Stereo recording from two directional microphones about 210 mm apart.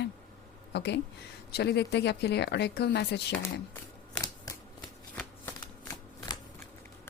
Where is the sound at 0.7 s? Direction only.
55° left (ahead or behind).